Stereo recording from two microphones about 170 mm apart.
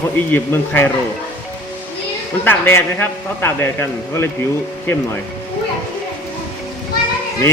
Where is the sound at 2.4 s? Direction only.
15° left (ahead or behind).